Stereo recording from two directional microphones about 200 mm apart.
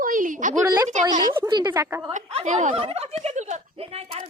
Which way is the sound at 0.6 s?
15° right (ahead or behind).